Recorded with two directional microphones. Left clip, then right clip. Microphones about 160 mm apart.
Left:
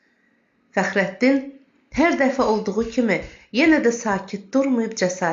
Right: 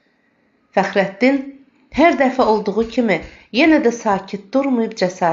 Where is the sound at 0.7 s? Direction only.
20° right (ahead or behind).